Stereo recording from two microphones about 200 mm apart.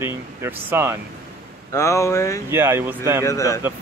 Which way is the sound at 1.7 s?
15° left (ahead or behind).